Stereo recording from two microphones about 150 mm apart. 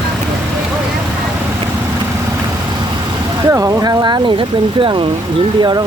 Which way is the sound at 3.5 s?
25° right (ahead or behind).